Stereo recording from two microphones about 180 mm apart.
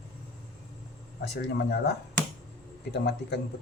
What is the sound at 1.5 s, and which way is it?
Speech, 65° left (ahead or behind).